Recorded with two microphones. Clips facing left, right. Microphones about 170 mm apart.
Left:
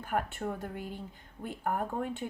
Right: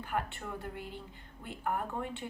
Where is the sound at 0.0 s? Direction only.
45° left (ahead or behind).